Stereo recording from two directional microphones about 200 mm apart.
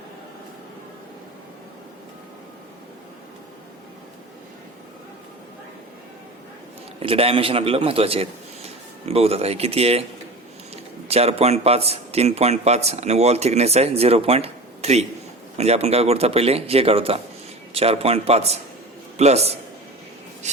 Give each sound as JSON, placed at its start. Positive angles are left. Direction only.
{"t": 7.0, "sound": "a man's voice", "side_deg": -30}
{"t": 11.1, "sound": "a man's voice", "side_deg": -30}